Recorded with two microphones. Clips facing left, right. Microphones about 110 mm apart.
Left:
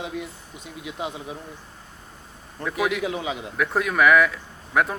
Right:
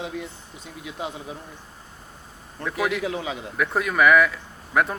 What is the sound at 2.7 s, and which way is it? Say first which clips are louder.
Speech: left 1 dB; 15° left (ahead or behind).